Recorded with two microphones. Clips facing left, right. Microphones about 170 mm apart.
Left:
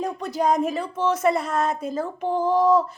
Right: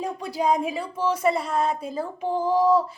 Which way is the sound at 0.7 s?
10° right (ahead or behind).